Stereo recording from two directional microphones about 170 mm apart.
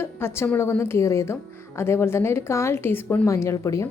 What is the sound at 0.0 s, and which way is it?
Speech, 15° left (ahead or behind).